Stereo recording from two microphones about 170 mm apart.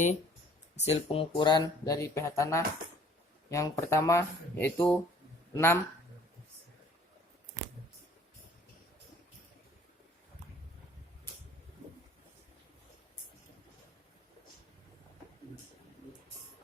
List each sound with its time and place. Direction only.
0.8 s speech: 35° left (ahead or behind); by 5.8 s 15° left (ahead or behind)